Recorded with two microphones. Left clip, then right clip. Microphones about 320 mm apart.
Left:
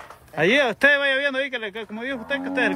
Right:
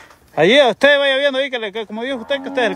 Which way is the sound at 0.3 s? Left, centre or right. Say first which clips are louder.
Right 8 dB; centre.